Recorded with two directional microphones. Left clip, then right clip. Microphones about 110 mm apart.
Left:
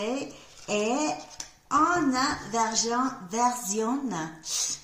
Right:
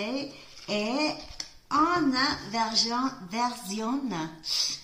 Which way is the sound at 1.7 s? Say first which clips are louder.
Left 1 dB; centre (ahead or behind).